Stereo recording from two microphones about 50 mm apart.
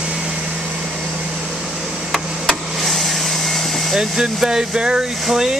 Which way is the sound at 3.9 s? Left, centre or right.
Centre.